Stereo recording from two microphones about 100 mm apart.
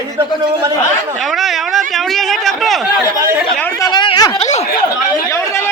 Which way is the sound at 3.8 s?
45° left (ahead or behind).